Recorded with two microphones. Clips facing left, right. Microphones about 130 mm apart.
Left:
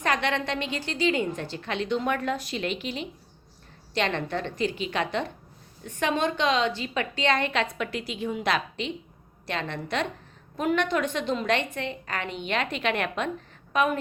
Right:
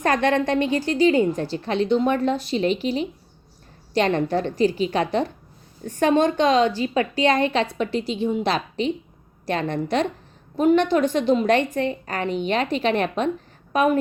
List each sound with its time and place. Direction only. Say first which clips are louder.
0.0 s a woman's voice: right 7 dB; 45° right (ahead or behind)